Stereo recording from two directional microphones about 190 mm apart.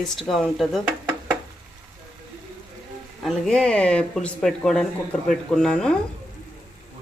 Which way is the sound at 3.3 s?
5° left (ahead or behind).